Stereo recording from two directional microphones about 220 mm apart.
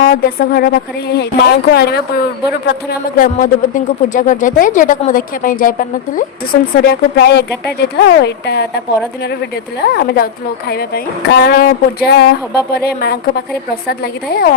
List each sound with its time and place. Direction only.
0.0 s speech: 40° left (ahead or behind)
3.2 s speech: 35° left (ahead or behind)